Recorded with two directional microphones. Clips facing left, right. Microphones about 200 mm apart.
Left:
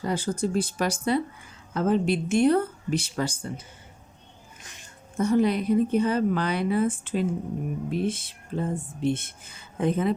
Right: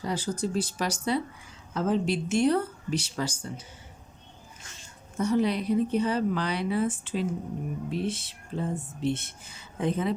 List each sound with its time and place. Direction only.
0.0 s speech: 55° left (ahead or behind)
5.1 s speech: 50° left (ahead or behind)